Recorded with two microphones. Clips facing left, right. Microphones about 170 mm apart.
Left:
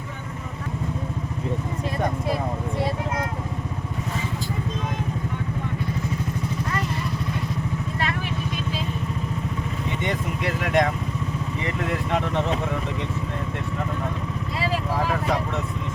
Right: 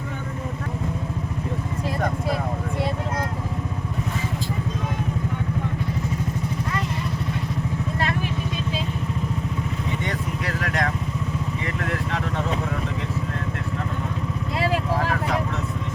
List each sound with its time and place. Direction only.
10.1 s vehicle: 20° left (ahead or behind)